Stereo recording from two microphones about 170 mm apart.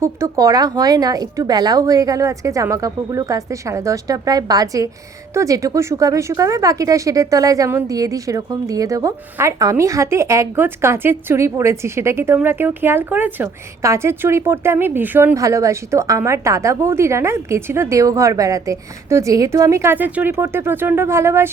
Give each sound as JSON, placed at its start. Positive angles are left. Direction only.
{"t": 0.0, "sound": "a woman's voice", "side_deg": -20}